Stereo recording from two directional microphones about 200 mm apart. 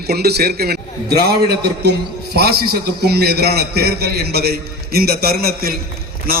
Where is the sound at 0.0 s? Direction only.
50° right (ahead or behind).